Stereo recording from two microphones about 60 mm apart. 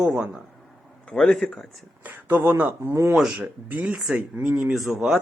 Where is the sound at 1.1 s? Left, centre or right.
Centre.